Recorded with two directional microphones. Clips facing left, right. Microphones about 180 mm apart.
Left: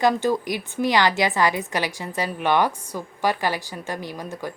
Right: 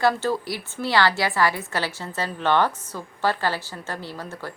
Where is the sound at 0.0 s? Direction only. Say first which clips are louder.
Left 2 dB; 15° left (ahead or behind).